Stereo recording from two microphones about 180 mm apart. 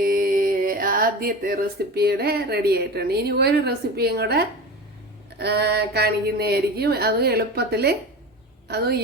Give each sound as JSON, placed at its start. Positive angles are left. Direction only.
{"t": 0.0, "sound": "mantra", "side_deg": -55}
{"t": 2.0, "sound": "a woman's voice", "side_deg": -60}